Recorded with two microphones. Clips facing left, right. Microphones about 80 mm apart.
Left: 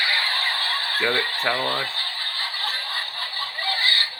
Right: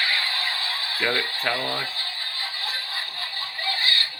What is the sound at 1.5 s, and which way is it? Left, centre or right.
Rattle, left.